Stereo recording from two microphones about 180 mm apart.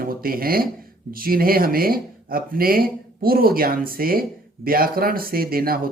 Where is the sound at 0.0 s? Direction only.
55° right (ahead or behind).